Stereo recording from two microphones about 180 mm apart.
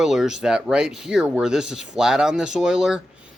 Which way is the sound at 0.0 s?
Centre (ahead or behind).